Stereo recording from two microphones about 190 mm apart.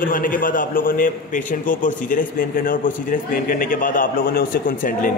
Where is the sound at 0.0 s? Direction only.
45° left (ahead or behind).